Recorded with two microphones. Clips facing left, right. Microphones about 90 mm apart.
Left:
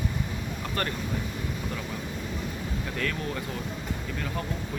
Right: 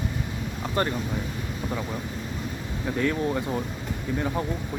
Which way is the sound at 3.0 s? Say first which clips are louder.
Right 8 dB; 20° right (ahead or behind).